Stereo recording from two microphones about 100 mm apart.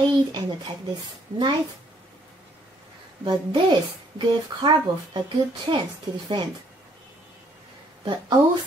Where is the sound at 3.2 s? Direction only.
55° right (ahead or behind).